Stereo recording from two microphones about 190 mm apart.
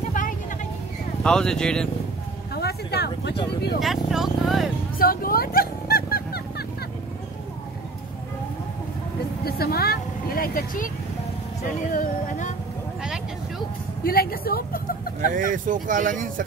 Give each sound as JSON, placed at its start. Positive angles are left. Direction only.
{"t": 1.2, "sound": "speech", "side_deg": 5}
{"t": 2.5, "sound": "a sound", "side_deg": 55}
{"t": 3.8, "sound": "speech", "side_deg": 0}
{"t": 4.9, "sound": "a sound", "side_deg": 50}
{"t": 9.4, "sound": "vehicle", "side_deg": 55}
{"t": 11.9, "sound": "speech", "side_deg": 40}
{"t": 14.0, "sound": "speech", "side_deg": 50}
{"t": 15.3, "sound": "speech", "side_deg": -45}